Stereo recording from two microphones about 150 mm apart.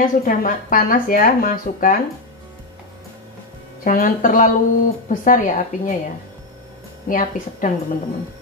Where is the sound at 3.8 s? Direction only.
70° left (ahead or behind).